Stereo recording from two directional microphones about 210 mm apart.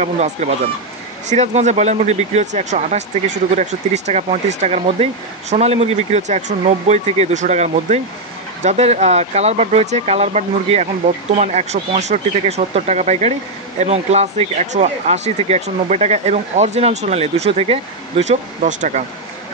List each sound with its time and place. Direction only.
0.0 s speech: 35° right (ahead or behind)